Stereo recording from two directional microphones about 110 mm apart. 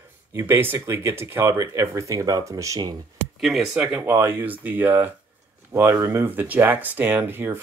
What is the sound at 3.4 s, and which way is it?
Speech, centre (ahead or behind).